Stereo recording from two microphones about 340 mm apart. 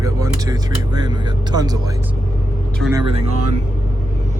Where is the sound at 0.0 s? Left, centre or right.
Centre.